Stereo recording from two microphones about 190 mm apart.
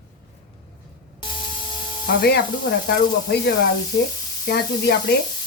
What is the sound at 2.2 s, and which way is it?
A woman's voice, 60° left (ahead or behind).